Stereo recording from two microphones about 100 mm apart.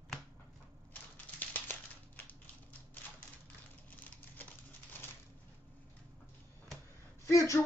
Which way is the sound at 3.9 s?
15° left (ahead or behind).